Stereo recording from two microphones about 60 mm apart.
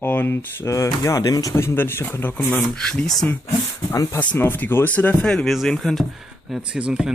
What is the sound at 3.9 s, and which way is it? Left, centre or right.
Speech, left.